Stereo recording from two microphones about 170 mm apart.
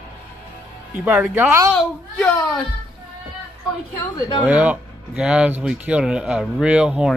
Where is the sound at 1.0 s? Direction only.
10° right (ahead or behind).